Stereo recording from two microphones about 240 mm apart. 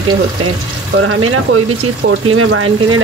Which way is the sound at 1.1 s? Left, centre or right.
Right.